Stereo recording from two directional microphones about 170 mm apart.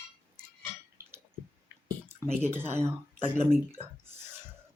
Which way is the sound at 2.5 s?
15° right (ahead or behind).